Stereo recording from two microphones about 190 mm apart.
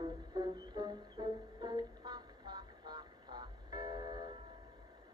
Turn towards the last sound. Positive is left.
turn(degrees=-20)  # may be behind; listen again after turning